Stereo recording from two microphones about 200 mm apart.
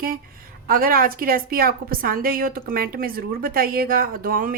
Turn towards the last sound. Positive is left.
turn(degrees=-45)  # may be behind; listen again after turning